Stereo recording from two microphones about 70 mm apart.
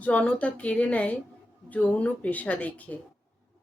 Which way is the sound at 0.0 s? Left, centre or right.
Left.